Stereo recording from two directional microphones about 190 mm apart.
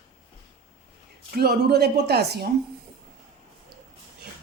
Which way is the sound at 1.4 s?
55° right (ahead or behind).